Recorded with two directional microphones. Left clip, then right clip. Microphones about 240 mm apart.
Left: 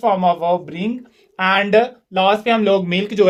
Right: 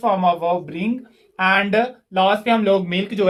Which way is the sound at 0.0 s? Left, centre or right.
Left.